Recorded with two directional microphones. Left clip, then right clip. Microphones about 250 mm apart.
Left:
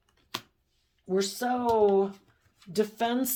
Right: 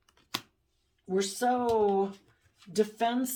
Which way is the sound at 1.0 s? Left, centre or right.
Left.